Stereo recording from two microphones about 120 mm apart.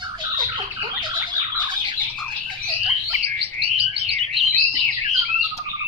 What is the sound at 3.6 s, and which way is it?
Bird, 50° right (ahead or behind).